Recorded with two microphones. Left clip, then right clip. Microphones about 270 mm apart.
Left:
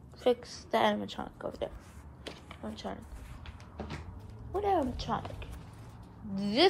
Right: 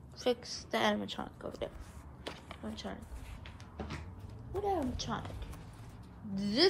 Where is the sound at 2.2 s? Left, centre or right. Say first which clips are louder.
Left 1 dB; centre.